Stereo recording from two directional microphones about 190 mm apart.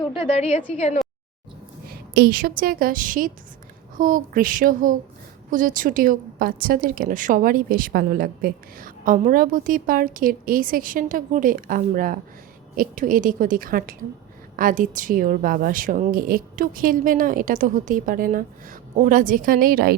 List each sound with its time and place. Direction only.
0.0 s a woman's voice: 30° left (ahead or behind)
1.9 s a woman's voice: 55° right (ahead or behind)